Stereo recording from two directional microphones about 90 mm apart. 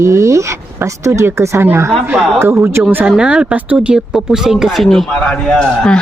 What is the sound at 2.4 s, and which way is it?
Speech, 30° right (ahead or behind).